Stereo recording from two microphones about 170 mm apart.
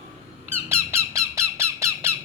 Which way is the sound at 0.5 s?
15° right (ahead or behind).